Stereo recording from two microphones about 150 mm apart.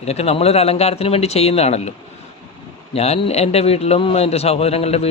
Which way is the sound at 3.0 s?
45° left (ahead or behind).